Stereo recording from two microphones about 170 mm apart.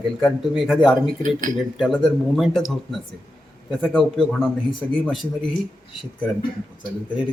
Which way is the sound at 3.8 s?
Centre (ahead or behind).